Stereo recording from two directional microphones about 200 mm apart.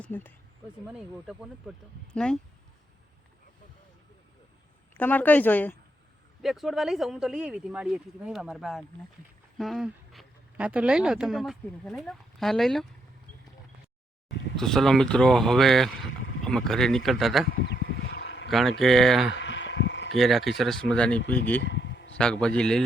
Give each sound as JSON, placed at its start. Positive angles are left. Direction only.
{"t": 0.0, "sound": "speech", "side_deg": 10}
{"t": 0.9, "sound": "speech", "side_deg": -5}
{"t": 4.9, "sound": "speech", "side_deg": 10}
{"t": 14.5, "sound": "speech", "side_deg": 0}
{"t": 17.7, "sound": "a sound", "side_deg": 55}
{"t": 18.5, "sound": "speech", "side_deg": 0}
{"t": 19.3, "sound": "a sound", "side_deg": 65}
{"t": 20.1, "sound": "speech", "side_deg": 0}
{"t": 21.6, "sound": "a sound", "side_deg": 60}
{"t": 22.2, "sound": "speech", "side_deg": 5}